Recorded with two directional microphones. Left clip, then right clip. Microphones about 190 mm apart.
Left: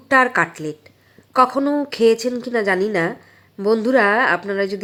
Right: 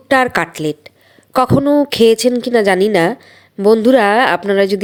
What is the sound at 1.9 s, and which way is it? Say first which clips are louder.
A woman's voice: right 6 dB; 30° right (ahead or behind).